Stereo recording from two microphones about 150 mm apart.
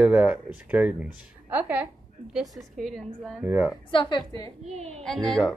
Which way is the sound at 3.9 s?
35° left (ahead or behind).